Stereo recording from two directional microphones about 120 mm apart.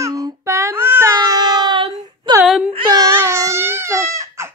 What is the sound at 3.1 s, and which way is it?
Crying, 20° right (ahead or behind).